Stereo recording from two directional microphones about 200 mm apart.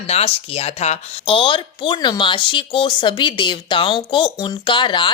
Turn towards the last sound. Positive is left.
turn(degrees=25)  # may be behind; listen again after turning